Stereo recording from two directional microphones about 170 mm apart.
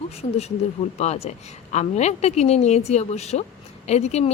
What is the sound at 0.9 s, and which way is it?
A woman's voice, 40° left (ahead or behind).